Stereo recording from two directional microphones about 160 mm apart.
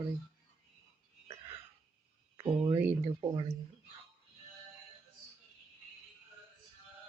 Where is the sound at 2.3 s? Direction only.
15° right (ahead or behind).